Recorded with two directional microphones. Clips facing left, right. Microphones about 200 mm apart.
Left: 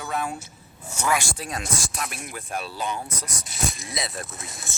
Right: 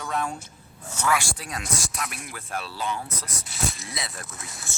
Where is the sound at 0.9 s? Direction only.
15° left (ahead or behind).